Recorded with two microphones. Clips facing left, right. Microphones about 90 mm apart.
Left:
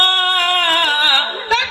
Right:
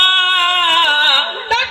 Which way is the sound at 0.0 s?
20° left (ahead or behind).